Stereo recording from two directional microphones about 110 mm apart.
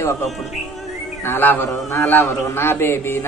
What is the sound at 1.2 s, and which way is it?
A woman's voice, 20° left (ahead or behind).